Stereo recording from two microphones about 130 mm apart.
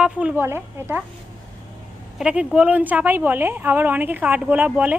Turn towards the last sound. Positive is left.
turn(degrees=-10)  # may be behind; listen again after turning